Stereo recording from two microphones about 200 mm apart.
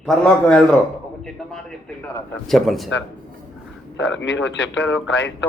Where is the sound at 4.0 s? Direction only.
65° left (ahead or behind).